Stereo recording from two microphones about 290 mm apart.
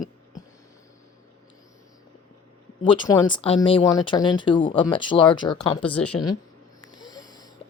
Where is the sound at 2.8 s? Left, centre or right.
Centre.